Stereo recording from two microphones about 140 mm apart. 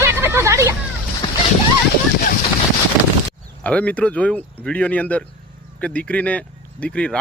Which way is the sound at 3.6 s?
10° left (ahead or behind).